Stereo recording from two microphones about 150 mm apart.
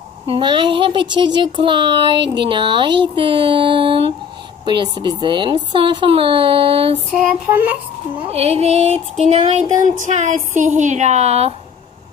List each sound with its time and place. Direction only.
0.3 s speech: 30° right (ahead or behind)
7.1 s female singing: 10° right (ahead or behind)
8.3 s a woman's voice: 45° right (ahead or behind)
9.8 s a woman's voice: 55° right (ahead or behind)